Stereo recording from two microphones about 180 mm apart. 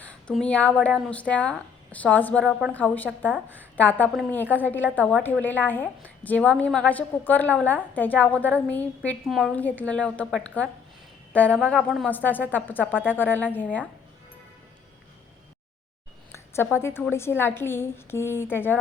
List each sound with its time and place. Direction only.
0.0 s speech: 5° left (ahead or behind)
16.3 s a woman's voice: 15° left (ahead or behind)